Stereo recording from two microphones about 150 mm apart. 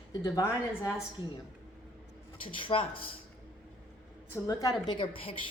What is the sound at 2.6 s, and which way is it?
Speech, 35° left (ahead or behind).